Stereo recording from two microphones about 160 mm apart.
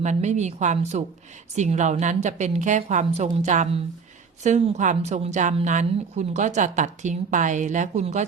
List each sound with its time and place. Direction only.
0.0 s a woman's voice: 45° right (ahead or behind)